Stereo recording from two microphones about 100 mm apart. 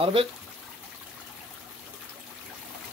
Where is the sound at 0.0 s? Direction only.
65° right (ahead or behind).